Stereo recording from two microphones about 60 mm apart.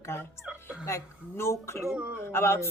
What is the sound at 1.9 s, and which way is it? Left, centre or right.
Speech, centre.